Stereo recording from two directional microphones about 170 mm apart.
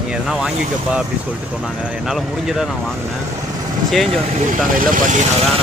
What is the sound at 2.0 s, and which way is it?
Speech, centre (ahead or behind).